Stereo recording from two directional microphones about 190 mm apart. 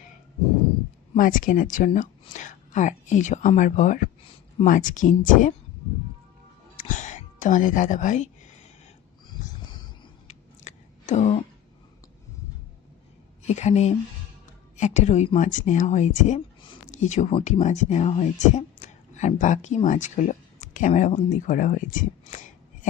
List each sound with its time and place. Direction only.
1.1 s speech: 45° left (ahead or behind)
6.7 s speech: 45° left (ahead or behind)
9.6 s a sound: 25° left (ahead or behind)
10.2 s chewing: 40° left (ahead or behind)
13.5 s speech: 35° left (ahead or behind)